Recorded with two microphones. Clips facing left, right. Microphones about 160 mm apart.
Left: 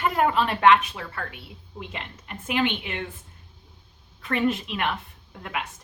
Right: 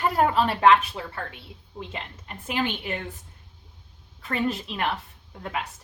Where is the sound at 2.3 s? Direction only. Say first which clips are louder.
Left 3 dB; 35° right (ahead or behind).